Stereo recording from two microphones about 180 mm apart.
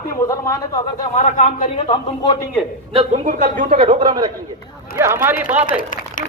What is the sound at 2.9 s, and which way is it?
Speech, 30° right (ahead or behind).